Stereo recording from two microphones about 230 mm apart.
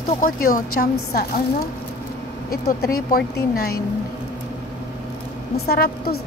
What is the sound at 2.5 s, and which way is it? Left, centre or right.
Speech, left.